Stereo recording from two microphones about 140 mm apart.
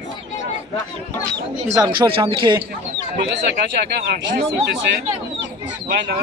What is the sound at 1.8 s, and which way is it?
Speech, 35° right (ahead or behind).